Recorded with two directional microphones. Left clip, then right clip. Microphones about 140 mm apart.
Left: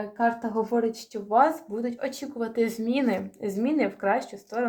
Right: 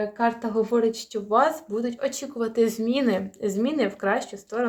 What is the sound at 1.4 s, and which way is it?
Speech, 25° right (ahead or behind).